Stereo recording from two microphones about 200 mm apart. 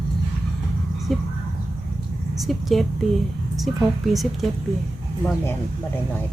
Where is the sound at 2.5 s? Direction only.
Centre (ahead or behind).